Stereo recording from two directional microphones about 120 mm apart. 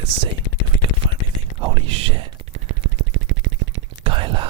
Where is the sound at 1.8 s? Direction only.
45° right (ahead or behind).